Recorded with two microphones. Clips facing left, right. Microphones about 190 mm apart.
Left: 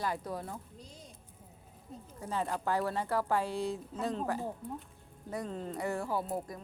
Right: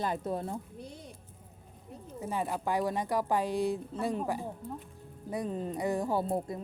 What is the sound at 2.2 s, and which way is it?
Speech, 10° right (ahead or behind).